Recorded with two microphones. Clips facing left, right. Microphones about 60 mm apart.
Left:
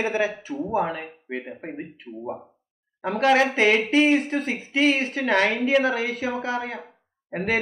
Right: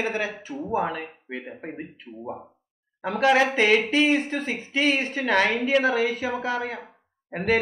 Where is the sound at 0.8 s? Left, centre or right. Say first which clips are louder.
Even; left.